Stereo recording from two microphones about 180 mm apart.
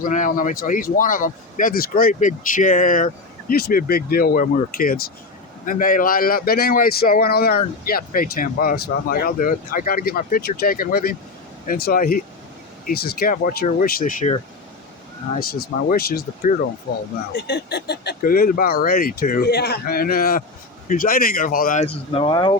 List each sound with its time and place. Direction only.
0.0 s speech: 45° left (ahead or behind)
15.4 s speech: 55° left (ahead or behind)
21.8 s speech: 30° left (ahead or behind)